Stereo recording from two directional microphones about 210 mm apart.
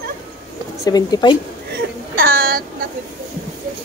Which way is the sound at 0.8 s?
20° left (ahead or behind).